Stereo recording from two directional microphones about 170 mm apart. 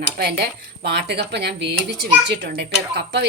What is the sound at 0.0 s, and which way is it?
A woman's voice, 75° right (ahead or behind).